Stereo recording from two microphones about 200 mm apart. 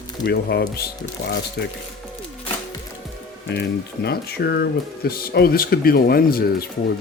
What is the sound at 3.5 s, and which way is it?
Speech, 55° left (ahead or behind).